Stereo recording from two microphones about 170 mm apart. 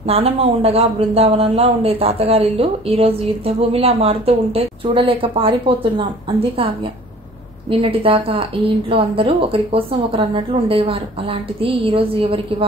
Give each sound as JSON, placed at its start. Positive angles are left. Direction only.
{"t": 0.0, "sound": "a man's voice", "side_deg": -35}
{"t": 7.8, "sound": "a man's voice", "side_deg": -30}